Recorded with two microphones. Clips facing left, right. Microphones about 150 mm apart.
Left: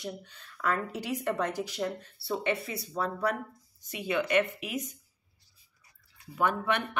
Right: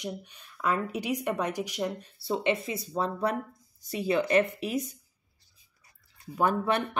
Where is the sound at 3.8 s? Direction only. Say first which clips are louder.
Right 4 dB; 35° right (ahead or behind).